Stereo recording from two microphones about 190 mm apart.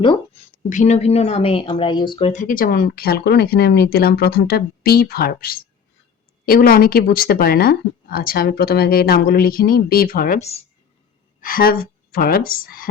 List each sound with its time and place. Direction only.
0.7 s speech: 40° left (ahead or behind)